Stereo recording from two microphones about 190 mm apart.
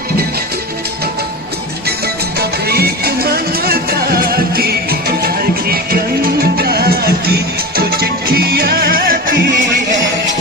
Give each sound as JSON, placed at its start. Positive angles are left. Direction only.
{"t": 2.4, "sound": "music", "side_deg": -55}